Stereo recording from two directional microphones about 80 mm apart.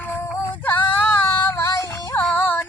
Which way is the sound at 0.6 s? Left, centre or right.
Left.